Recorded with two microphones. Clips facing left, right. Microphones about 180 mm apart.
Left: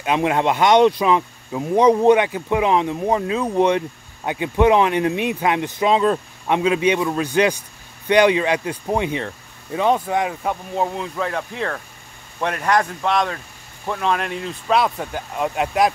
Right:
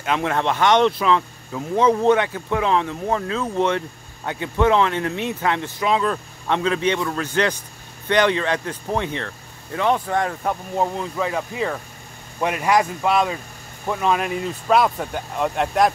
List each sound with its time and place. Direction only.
0.0 s speech: 15° left (ahead or behind)